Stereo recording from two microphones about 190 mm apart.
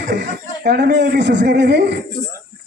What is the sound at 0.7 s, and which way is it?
Speech, 60° right (ahead or behind).